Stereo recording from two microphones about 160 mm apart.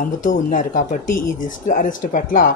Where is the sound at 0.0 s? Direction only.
55° left (ahead or behind).